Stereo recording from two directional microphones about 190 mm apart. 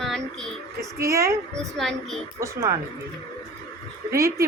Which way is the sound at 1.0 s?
15° right (ahead or behind).